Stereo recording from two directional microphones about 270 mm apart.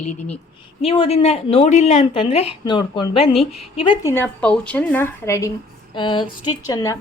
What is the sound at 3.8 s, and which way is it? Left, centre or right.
Speech, centre.